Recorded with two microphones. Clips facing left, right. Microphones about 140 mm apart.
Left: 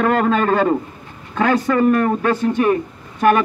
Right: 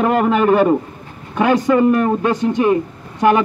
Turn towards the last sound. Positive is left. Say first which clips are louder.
# right 1 dB
turn(degrees=-15)  # may be behind; listen again after turning